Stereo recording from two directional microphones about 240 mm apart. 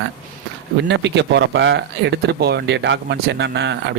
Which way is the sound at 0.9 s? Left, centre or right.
Right.